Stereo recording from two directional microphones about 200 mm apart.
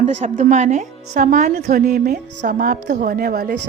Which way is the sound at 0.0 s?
35° right (ahead or behind).